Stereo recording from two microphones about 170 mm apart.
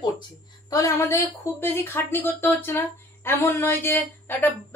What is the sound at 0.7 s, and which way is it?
Speech, 20° left (ahead or behind).